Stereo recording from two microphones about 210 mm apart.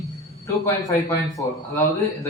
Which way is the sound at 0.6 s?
15° left (ahead or behind).